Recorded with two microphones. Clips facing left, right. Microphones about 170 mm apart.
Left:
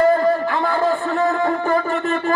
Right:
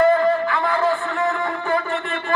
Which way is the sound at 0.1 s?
40° left (ahead or behind).